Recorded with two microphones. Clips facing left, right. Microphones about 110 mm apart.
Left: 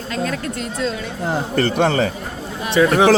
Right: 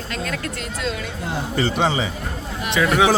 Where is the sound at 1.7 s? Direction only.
60° left (ahead or behind).